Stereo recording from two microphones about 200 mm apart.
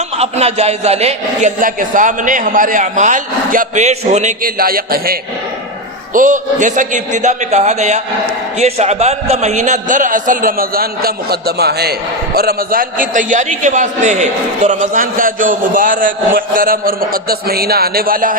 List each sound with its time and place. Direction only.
0.2 s a man's voice: 30° right (ahead or behind); by 5.1 s 45° right (ahead or behind)
6.1 s a man's voice: 40° right (ahead or behind)